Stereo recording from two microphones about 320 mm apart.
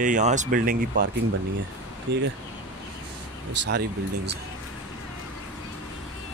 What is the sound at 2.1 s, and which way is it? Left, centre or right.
Speech, right.